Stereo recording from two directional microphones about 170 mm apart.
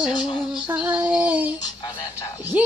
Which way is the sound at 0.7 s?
10° right (ahead or behind).